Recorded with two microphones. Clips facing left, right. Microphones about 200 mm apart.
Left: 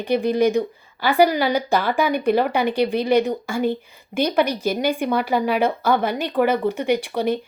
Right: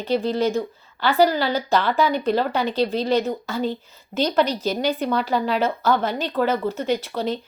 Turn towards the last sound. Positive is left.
turn(degrees=15)  # may be behind; listen again after turning